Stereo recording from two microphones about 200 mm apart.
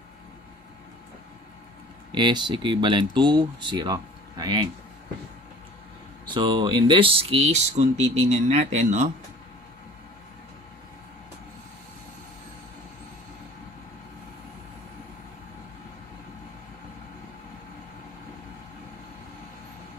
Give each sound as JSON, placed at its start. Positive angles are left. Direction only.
{"t": 2.1, "sound": "speech", "side_deg": -20}
{"t": 6.2, "sound": "speech", "side_deg": -25}